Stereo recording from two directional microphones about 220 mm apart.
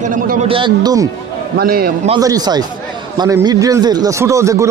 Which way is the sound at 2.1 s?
15° right (ahead or behind).